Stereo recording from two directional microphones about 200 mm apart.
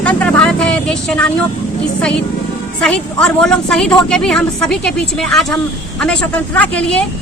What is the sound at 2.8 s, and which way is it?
A woman's voice, 5° left (ahead or behind).